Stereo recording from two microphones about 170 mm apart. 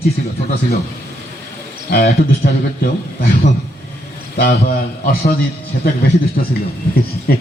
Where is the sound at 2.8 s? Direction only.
60° left (ahead or behind).